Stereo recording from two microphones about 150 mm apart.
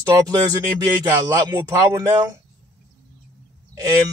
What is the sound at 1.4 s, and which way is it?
Speech, 20° right (ahead or behind).